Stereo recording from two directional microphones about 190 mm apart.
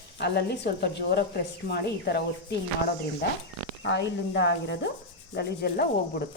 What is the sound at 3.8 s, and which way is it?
Speech, 65° left (ahead or behind).